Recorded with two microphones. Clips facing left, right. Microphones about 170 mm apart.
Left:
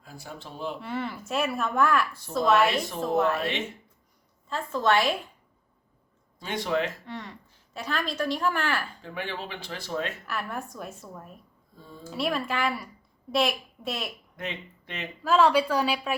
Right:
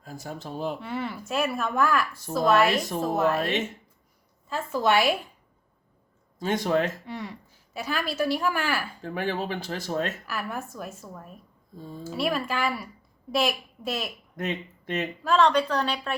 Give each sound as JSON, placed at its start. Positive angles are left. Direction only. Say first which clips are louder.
{"t": 0.0, "sound": "speech", "louder": "right 5 dB", "side_deg": -45}
{"t": 0.8, "sound": "a woman's voice", "louder": "right 1 dB", "side_deg": 0}
{"t": 4.4, "sound": "a woman's voice", "louder": "right 1 dB", "side_deg": -10}
{"t": 6.4, "sound": "speech", "louder": "right 4 dB", "side_deg": -45}
{"t": 7.0, "sound": "a woman's voice", "louder": "right 3 dB", "side_deg": -10}
{"t": 9.0, "sound": "speech", "louder": "right 6 dB", "side_deg": -45}
{"t": 10.2, "sound": "a woman's voice", "louder": "right 1 dB", "side_deg": 0}
{"t": 14.3, "sound": "speech", "louder": "right 7 dB", "side_deg": -45}
{"t": 15.2, "sound": "a woman's voice", "louder": "left 1 dB", "side_deg": 5}